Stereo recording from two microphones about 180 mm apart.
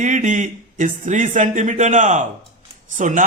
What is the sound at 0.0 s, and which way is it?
A man's voice, 45° right (ahead or behind).